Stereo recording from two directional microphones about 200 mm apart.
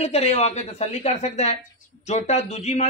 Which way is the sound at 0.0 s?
30° left (ahead or behind).